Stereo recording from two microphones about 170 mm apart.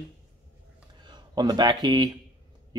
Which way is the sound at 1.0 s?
25° right (ahead or behind).